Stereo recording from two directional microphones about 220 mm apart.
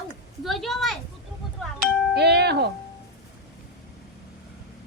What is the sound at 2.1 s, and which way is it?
Speech, 50° right (ahead or behind).